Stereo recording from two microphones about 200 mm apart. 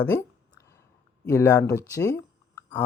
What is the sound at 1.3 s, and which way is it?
Speech, 15° left (ahead or behind).